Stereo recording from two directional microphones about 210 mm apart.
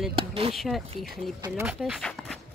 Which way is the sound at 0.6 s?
Centre (ahead or behind).